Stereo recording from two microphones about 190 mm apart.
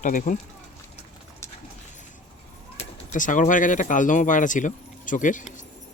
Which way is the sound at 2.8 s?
45° left (ahead or behind).